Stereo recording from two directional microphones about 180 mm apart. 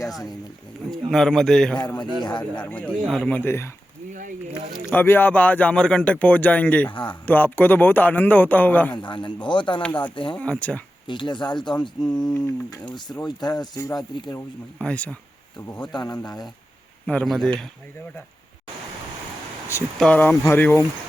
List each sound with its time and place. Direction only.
0.1 s speech: centre (ahead or behind)
4.1 s speech: 45° right (ahead or behind)
4.9 s speech: 10° left (ahead or behind)
6.9 s speech: 25° left (ahead or behind)
7.3 s speech: 10° left (ahead or behind)
9.0 s speech: 25° left (ahead or behind)
10.3 s speech: 5° left (ahead or behind)
11.0 s speech: 25° left (ahead or behind)
12.3 s speech: 10° left (ahead or behind)
14.3 s speech: 5° left (ahead or behind)
15.9 s speech: 25° left (ahead or behind)
17.1 s speech: 5° left (ahead or behind)
20.0 s speech: 5° left (ahead or behind)